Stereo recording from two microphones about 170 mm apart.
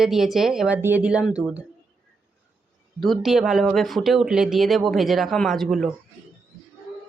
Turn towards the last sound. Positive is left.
turn(degrees=0)  # may be behind; listen again after turning